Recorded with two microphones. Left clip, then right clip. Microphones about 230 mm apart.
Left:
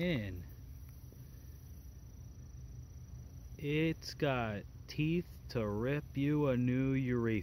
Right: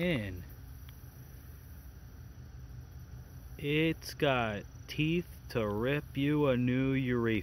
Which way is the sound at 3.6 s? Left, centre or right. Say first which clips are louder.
Right 4 dB; centre.